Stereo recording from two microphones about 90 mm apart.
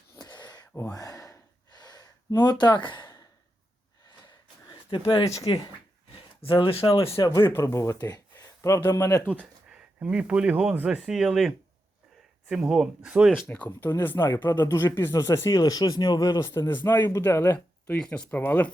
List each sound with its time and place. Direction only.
0.2 s a sound: 50° left (ahead or behind)
0.9 s gasp: 40° left (ahead or behind)
2.4 s speech: 55° left (ahead or behind)
4.7 s a sound: 70° left (ahead or behind)
5.4 s speech: 80° left
7.2 s speech: 40° left (ahead or behind)
9.3 s speech: 10° right (ahead or behind)
13.5 s speech: 20° left (ahead or behind)
13.7 s speech: 35° left (ahead or behind)
14.0 s speech: 25° left (ahead or behind); by 16.5 s 40° left (ahead or behind)
16.6 s speech: 30° left (ahead or behind)
17.9 s speech: 10° left (ahead or behind)
18.3 s speech: 20° left (ahead or behind)